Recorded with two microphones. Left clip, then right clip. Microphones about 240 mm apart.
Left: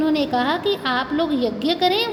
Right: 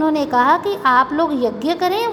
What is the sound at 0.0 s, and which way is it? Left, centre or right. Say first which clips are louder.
A woman's voice: right 5 dB; centre.